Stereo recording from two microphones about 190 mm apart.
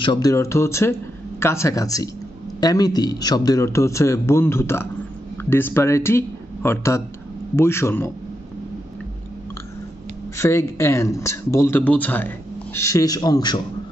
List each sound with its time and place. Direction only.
0.0 s speech: 20° left (ahead or behind)
10.3 s speech: 15° left (ahead or behind)